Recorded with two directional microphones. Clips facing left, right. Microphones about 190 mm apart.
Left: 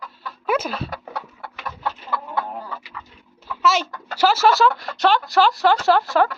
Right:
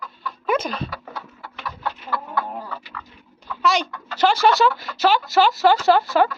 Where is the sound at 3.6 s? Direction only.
5° left (ahead or behind).